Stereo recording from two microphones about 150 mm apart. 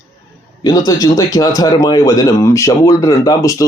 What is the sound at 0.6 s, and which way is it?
Speech, 25° left (ahead or behind).